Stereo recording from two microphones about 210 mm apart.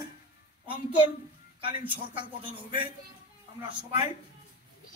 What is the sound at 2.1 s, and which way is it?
Speech, 25° right (ahead or behind).